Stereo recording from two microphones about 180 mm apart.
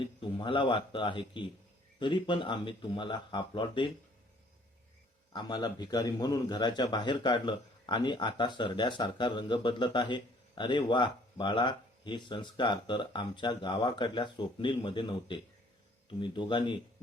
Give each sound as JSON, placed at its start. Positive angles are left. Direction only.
{"t": 0.0, "sound": "a man's voice", "side_deg": 30}
{"t": 5.3, "sound": "a man's voice", "side_deg": 25}